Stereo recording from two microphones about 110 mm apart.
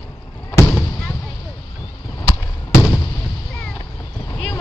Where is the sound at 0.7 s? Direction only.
20° left (ahead or behind).